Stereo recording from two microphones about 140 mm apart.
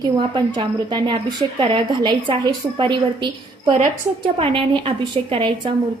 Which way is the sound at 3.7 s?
55° right (ahead or behind).